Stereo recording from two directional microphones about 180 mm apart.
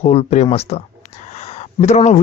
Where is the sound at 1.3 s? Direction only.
35° left (ahead or behind).